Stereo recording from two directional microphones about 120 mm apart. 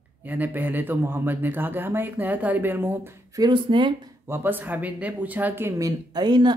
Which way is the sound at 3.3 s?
40° right (ahead or behind).